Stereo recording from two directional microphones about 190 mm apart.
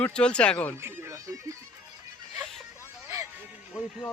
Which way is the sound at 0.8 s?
10° right (ahead or behind).